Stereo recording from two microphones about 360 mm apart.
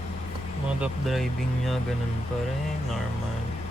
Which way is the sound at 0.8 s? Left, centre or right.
Centre.